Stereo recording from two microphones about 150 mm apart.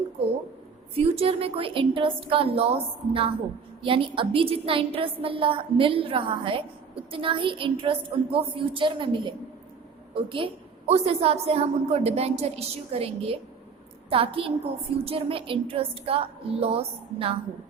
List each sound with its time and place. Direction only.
0.9 s a woman's voice: 40° right (ahead or behind)